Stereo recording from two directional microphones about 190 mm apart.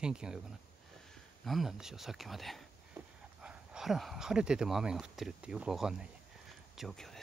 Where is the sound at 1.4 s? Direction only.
Centre (ahead or behind).